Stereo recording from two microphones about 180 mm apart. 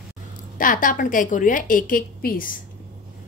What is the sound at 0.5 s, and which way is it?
A woman's voice, 50° left (ahead or behind).